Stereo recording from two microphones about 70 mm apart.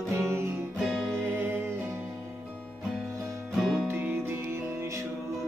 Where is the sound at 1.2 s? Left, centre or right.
Right.